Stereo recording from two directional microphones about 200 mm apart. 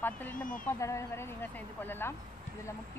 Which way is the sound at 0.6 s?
15° left (ahead or behind).